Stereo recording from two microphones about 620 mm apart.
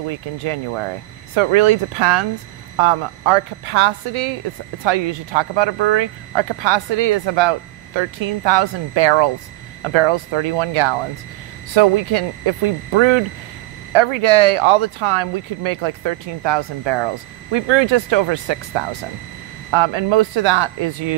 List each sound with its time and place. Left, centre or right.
0.1 s speech: right